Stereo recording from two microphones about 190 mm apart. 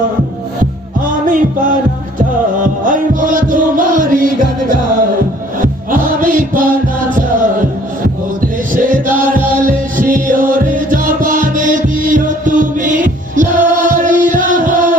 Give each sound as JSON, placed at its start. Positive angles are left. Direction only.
{"t": 1.3, "sound": "music", "side_deg": -45}
{"t": 2.8, "sound": "music", "side_deg": -45}
{"t": 8.4, "sound": "music", "side_deg": -45}